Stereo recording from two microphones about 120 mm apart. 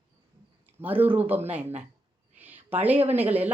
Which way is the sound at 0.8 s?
15° right (ahead or behind).